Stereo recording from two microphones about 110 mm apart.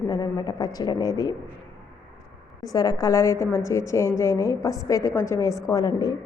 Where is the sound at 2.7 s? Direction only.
35° left (ahead or behind).